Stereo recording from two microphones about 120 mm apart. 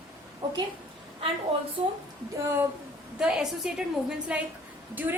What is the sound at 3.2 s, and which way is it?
A woman's voice, 5° right (ahead or behind).